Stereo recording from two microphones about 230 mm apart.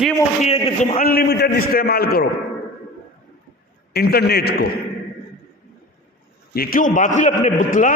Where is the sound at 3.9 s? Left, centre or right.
Left.